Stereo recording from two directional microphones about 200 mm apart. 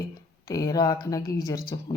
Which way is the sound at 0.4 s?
15° left (ahead or behind).